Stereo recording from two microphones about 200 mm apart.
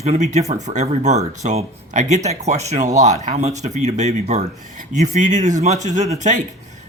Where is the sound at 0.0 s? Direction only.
35° right (ahead or behind).